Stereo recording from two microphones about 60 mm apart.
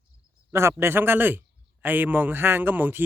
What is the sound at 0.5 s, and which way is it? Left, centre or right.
A man's voice, right.